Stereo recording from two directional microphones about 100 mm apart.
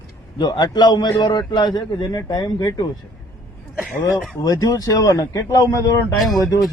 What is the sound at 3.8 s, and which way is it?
Speech, 5° right (ahead or behind).